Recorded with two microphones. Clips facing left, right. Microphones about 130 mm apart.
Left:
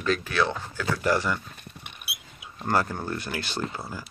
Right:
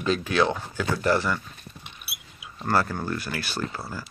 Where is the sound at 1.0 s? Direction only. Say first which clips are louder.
Right 1 dB; 15° left (ahead or behind).